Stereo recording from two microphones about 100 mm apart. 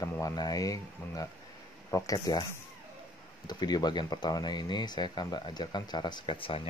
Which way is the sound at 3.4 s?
45° left (ahead or behind).